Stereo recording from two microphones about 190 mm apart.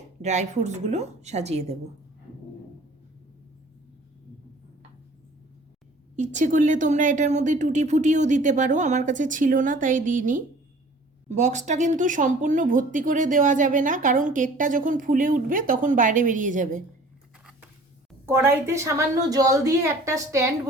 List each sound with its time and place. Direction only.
0.2 s a woman's voice: 35° right (ahead or behind)
6.1 s a woman's voice: 40° right (ahead or behind)
18.3 s a woman's voice: 10° right (ahead or behind)